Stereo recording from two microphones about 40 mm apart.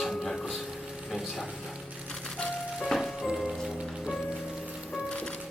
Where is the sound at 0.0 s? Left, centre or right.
Centre.